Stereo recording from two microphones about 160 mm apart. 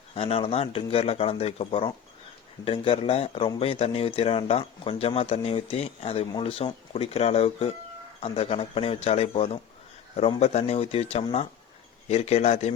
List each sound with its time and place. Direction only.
0.1 s speech: 35° left (ahead or behind)